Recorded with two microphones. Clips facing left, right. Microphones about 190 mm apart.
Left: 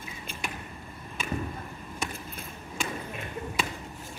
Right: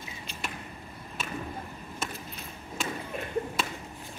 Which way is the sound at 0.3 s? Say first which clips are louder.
Left 2 dB; 55° left (ahead or behind).